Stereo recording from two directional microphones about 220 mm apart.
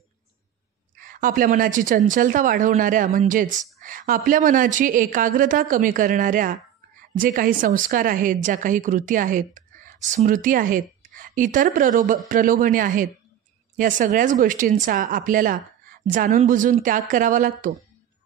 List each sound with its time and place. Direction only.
0.9 s speech: 40° right (ahead or behind)